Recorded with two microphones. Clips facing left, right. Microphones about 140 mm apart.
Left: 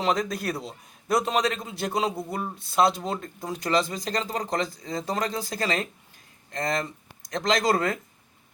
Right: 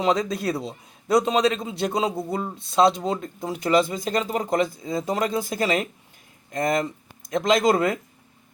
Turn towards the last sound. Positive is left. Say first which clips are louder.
# right 4 dB
turn(degrees=-20)  # may be behind; listen again after turning